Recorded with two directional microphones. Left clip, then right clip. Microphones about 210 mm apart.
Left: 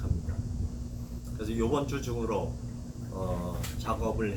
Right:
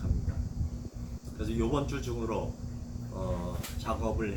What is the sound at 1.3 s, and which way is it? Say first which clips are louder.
A man's voice: left 2 dB; 10° left (ahead or behind).